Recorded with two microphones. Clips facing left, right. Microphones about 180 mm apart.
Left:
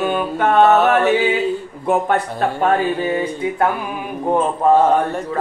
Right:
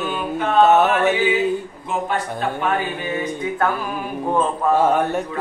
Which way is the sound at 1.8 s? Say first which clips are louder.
Left 9 dB; 55° left (ahead or behind).